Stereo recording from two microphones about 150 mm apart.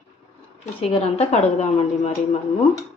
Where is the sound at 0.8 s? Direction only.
40° left (ahead or behind).